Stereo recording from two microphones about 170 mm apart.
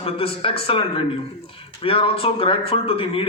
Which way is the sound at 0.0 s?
35° left (ahead or behind).